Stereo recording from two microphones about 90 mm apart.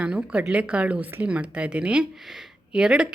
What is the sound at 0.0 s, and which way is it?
Speech, 10° right (ahead or behind).